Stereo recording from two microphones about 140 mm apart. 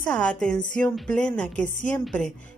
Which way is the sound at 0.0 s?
10° left (ahead or behind).